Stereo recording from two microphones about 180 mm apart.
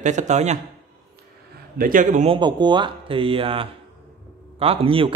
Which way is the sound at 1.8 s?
50° right (ahead or behind).